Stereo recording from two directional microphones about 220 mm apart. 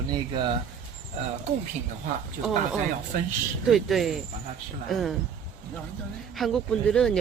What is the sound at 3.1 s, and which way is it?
Speech, 40° right (ahead or behind).